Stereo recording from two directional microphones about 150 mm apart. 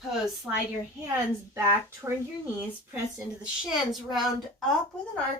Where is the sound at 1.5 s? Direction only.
15° right (ahead or behind).